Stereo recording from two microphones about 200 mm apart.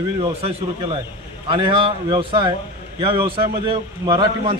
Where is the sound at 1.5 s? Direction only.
25° right (ahead or behind).